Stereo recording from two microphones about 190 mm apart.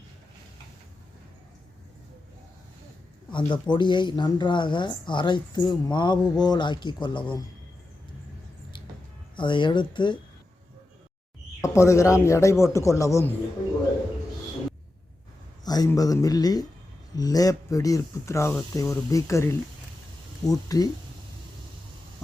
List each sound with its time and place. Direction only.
3.3 s speech: 25° left (ahead or behind)
9.3 s speech: 25° left (ahead or behind)
11.6 s speech: 15° left (ahead or behind)
15.6 s speech: 20° left (ahead or behind)